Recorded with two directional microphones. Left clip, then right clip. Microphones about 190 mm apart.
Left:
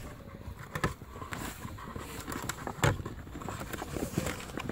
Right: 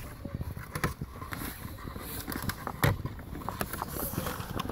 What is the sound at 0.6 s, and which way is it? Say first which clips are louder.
Vehicle: even; centre (ahead or behind).